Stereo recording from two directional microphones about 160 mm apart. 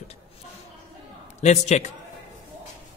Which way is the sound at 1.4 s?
45° left (ahead or behind).